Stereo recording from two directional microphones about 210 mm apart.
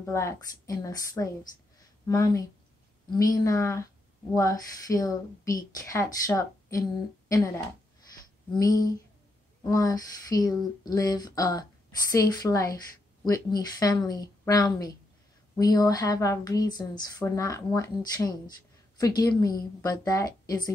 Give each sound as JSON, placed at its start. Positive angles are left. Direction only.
{"t": 0.0, "sound": "a woman's voice", "side_deg": 15}
{"t": 3.4, "sound": "a woman's voice", "side_deg": 15}